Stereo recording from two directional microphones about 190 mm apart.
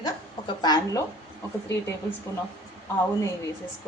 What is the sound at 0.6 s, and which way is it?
Speech, 20° left (ahead or behind).